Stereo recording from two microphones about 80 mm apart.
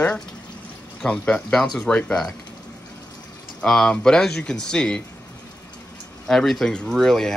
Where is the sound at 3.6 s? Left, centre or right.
Centre.